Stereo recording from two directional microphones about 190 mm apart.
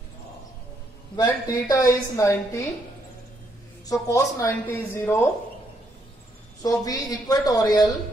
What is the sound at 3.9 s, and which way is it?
A woman's voice, 15° left (ahead or behind).